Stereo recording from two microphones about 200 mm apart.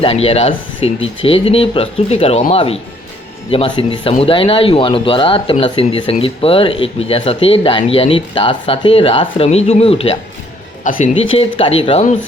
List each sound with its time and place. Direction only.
0.0 s speech: 30° left (ahead or behind)